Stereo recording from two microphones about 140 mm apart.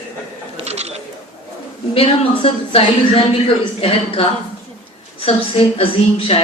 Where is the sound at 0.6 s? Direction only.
50° right (ahead or behind).